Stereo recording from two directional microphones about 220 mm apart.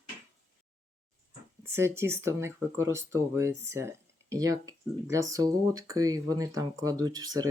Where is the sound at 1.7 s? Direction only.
10° right (ahead or behind).